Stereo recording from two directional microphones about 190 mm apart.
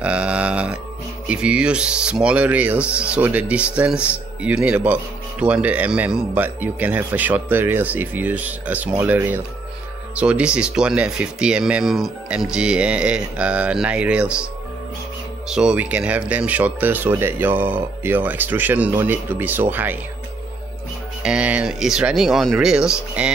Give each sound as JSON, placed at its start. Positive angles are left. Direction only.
{"t": 0.0, "sound": "a sound", "side_deg": -5}
{"t": 1.2, "sound": "speech", "side_deg": -5}
{"t": 15.4, "sound": "speech", "side_deg": -5}
{"t": 21.2, "sound": "speech", "side_deg": -5}